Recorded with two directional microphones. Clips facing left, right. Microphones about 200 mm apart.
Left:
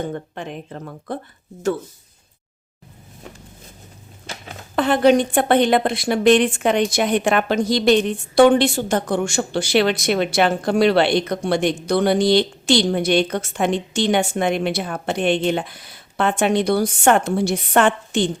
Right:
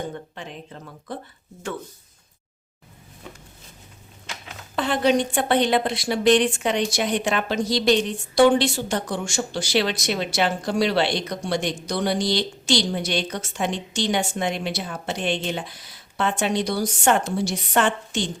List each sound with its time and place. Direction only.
0.1 s speech: 55° left (ahead or behind)
4.7 s a woman's voice: 55° left (ahead or behind)